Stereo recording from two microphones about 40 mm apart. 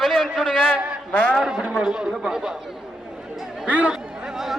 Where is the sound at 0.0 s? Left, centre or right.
Centre.